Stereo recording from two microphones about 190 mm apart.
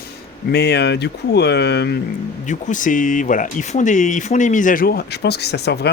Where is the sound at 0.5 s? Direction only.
60° left (ahead or behind).